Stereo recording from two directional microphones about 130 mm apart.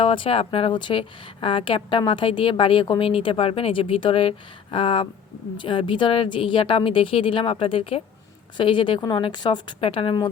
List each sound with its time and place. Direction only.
0.0 s a woman's voice: 40° left (ahead or behind)